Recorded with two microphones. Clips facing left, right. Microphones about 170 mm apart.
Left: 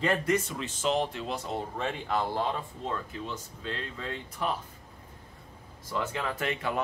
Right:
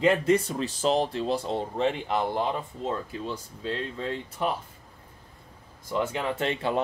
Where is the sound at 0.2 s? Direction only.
30° right (ahead or behind).